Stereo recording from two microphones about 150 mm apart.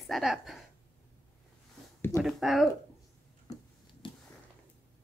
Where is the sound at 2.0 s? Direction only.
15° left (ahead or behind).